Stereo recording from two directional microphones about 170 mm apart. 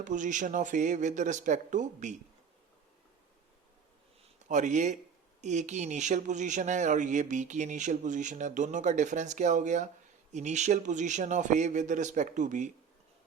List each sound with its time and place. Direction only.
0.0 s speech: 50° right (ahead or behind)
4.4 s speech: 45° right (ahead or behind)